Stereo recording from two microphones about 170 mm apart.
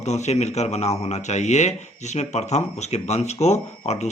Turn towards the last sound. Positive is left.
turn(degrees=40)  # may be behind; listen again after turning